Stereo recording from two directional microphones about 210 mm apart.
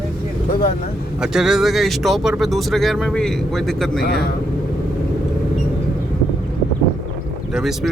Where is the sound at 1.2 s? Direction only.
Centre (ahead or behind).